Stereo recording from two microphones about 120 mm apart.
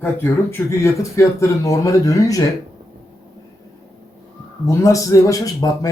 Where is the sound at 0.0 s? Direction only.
20° left (ahead or behind).